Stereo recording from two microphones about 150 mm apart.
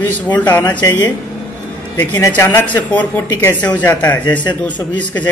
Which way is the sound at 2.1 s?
25° left (ahead or behind).